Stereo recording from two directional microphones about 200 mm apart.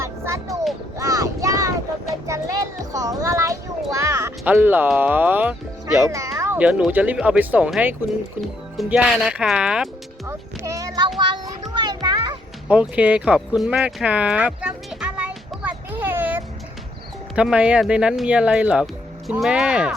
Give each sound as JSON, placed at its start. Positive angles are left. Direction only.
{"t": 0.0, "sound": "a sound", "side_deg": -15}
{"t": 2.2, "sound": "a child's voice", "side_deg": -15}
{"t": 3.9, "sound": "music", "side_deg": -15}
{"t": 4.5, "sound": "speech", "side_deg": -10}
{"t": 11.2, "sound": "children playing", "side_deg": -20}
{"t": 12.6, "sound": "a sound", "side_deg": -5}
{"t": 17.3, "sound": "speech", "side_deg": -5}